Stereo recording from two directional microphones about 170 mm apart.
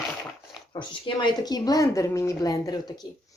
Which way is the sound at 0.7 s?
25° left (ahead or behind).